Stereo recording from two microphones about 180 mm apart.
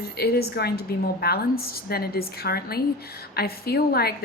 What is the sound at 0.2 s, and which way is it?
A woman's voice, 60° left (ahead or behind).